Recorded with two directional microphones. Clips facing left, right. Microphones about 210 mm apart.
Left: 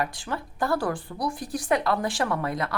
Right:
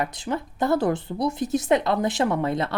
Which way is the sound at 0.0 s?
20° right (ahead or behind).